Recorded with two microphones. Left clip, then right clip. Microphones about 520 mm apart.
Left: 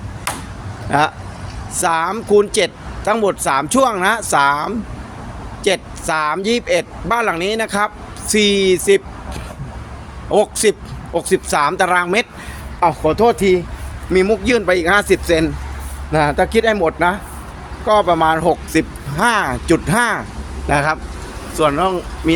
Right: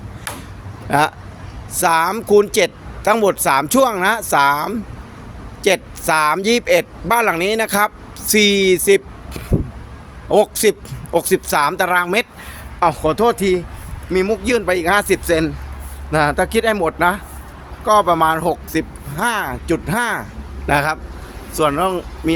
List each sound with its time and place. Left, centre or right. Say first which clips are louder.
0.9 s speech: even; right